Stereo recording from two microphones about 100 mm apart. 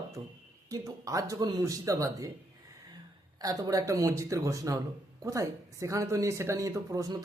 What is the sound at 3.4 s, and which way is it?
Speech, 35° right (ahead or behind).